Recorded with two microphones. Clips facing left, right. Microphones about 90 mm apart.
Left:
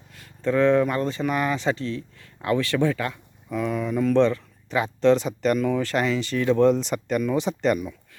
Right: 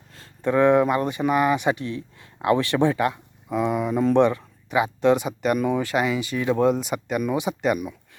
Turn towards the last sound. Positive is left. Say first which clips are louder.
# even
turn(degrees=-10)  # may be behind; listen again after turning